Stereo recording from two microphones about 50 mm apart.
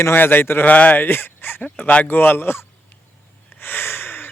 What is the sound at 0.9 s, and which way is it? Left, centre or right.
Speech, left.